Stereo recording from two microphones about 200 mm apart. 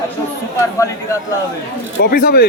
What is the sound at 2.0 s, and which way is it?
Speech, 45° left (ahead or behind).